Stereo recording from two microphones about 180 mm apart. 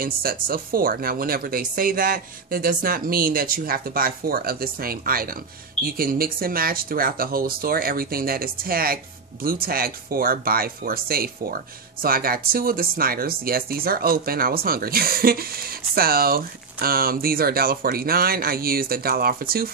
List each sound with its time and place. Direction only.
0.0 s speech: 55° right (ahead or behind)